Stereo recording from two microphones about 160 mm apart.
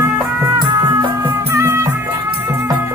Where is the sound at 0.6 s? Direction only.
30° right (ahead or behind).